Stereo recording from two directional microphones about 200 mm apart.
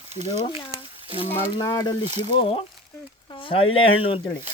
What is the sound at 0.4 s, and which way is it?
Speech, 25° left (ahead or behind).